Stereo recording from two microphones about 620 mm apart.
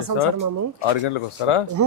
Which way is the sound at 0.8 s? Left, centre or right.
Left.